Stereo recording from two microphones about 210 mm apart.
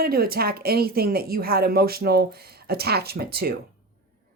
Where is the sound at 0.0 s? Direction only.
45° right (ahead or behind).